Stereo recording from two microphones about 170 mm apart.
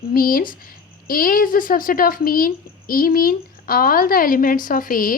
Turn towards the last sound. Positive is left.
turn(degrees=55)  # may be behind; listen again after turning